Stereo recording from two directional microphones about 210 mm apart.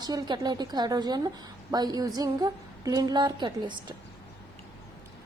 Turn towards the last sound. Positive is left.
turn(degrees=-20)  # may be behind; listen again after turning